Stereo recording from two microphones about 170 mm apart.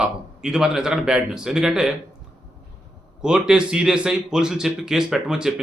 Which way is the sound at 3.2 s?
5° right (ahead or behind).